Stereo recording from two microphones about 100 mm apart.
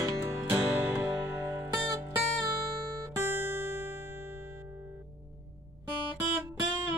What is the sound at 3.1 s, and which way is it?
Music, 20° right (ahead or behind).